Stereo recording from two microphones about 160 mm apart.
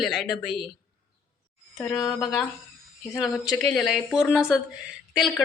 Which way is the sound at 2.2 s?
Centre (ahead or behind).